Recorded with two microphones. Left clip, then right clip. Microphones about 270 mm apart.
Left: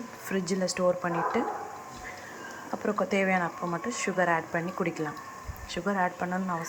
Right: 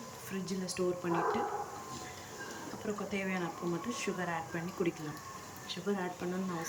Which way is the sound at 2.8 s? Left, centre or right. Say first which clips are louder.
Left 11 dB; left.